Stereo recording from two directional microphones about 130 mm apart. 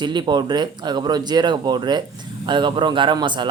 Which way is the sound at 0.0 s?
35° right (ahead or behind).